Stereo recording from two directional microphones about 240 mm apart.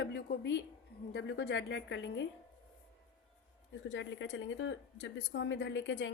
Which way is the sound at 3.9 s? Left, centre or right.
Left.